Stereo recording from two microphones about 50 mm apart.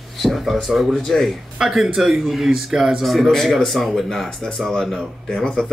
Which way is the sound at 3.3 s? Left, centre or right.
Centre.